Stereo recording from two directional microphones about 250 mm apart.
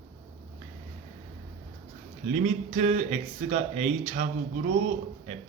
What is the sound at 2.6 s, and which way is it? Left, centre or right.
Speech, right.